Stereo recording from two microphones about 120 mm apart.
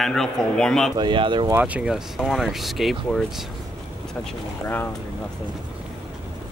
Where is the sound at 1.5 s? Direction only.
10° right (ahead or behind).